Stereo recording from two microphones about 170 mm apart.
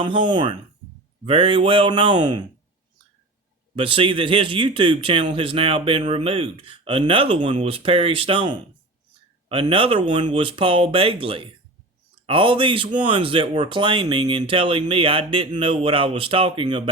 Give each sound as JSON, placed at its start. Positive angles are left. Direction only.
{"t": 0.0, "sound": "speech", "side_deg": -30}
{"t": 3.8, "sound": "speech", "side_deg": -30}